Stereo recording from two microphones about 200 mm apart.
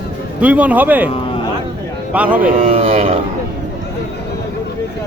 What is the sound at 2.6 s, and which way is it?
Speech, 30° right (ahead or behind).